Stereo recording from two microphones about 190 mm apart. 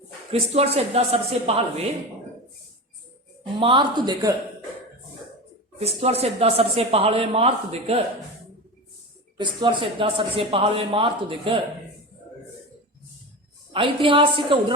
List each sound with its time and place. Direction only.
0.3 s speech: 30° right (ahead or behind)
3.6 s speech: 25° right (ahead or behind)
5.8 s speech: 35° right (ahead or behind)
9.4 s speech: 25° right (ahead or behind)
13.7 s speech: 25° right (ahead or behind)